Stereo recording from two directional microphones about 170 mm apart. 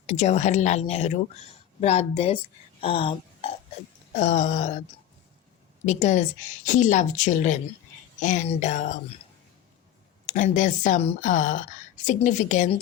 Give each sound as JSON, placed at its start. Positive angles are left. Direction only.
{"t": 0.0, "sound": "speech", "side_deg": 40}
{"t": 4.1, "sound": "a woman's voice", "side_deg": 45}
{"t": 10.2, "sound": "a woman's voice", "side_deg": 50}